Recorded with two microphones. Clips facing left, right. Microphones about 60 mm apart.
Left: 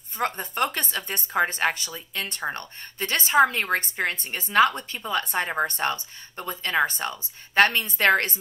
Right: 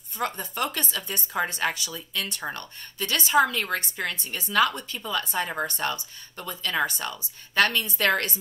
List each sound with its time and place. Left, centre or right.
0.2 s a woman's voice: left